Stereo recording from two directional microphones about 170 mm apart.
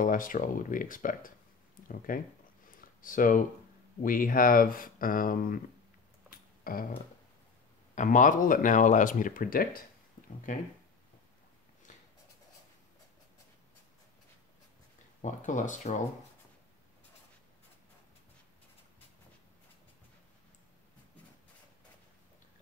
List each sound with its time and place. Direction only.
0.0 s speech: 50° left (ahead or behind)
2.7 s a sound: 55° left (ahead or behind)
4.0 s speech: 55° left (ahead or behind)
6.3 s a sound: 60° left (ahead or behind)
7.9 s speech: 45° left (ahead or behind)
11.9 s writing: 50° left (ahead or behind)
15.2 s speech: 45° left (ahead or behind)